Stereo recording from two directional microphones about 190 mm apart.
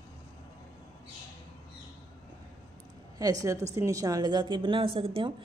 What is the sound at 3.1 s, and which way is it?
A woman's voice, 20° right (ahead or behind).